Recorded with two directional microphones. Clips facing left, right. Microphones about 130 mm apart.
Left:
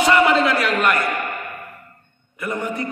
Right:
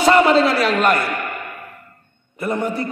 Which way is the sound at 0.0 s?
35° right (ahead or behind).